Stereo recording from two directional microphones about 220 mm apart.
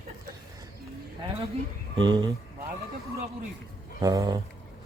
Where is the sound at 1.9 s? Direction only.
20° right (ahead or behind).